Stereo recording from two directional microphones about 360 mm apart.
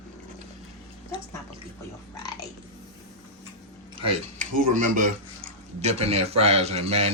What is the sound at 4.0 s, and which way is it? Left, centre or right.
Speech, centre.